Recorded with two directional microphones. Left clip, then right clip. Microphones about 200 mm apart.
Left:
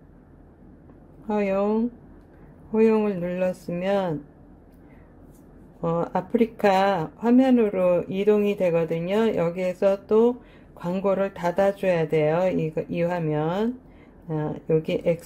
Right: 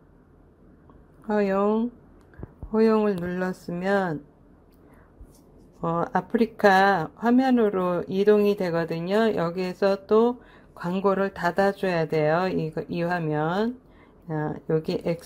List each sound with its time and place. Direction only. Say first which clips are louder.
1.2 s speech: right 1 dB; 25° right (ahead or behind)
5.8 s speech: even; 25° right (ahead or behind)